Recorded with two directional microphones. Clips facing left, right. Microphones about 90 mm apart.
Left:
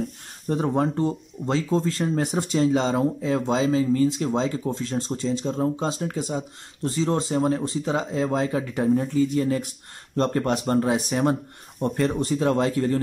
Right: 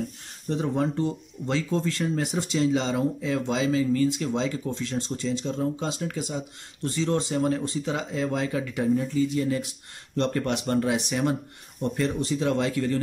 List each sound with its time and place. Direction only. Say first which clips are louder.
0.5 s speech: left 3 dB; 40° left (ahead or behind)